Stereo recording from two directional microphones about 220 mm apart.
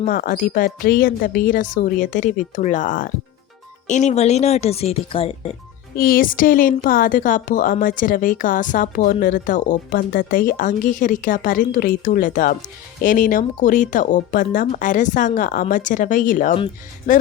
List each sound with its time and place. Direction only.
0.0 s a woman's voice: 40° left (ahead or behind)
6.0 s a woman's voice: 40° left (ahead or behind)